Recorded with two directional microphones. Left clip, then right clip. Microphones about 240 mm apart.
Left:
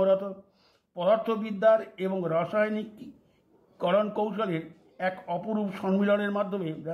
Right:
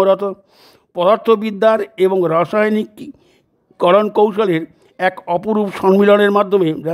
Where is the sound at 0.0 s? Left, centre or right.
Right.